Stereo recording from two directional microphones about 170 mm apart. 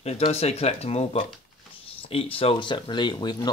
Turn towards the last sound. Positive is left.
turn(degrees=25)  # may be behind; listen again after turning